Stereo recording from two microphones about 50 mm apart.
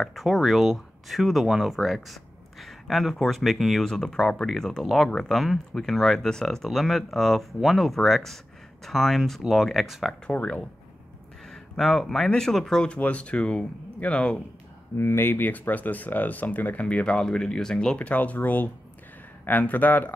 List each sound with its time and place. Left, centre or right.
0.0 s speech: centre
10.3 s speech: left
11.5 s a sound: centre
12.3 s speech: centre
12.8 s speech: left
15.0 s speech: left; by 17.9 s centre
17.9 s speech: left